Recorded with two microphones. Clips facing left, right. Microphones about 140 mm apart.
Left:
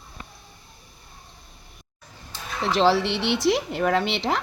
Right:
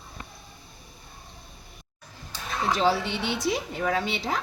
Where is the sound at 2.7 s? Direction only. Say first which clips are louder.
Left 5 dB; 85° left.